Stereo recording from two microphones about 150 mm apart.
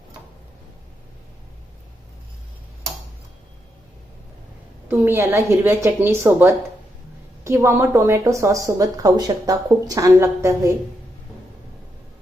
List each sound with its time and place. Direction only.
4.9 s a woman's voice: 15° right (ahead or behind)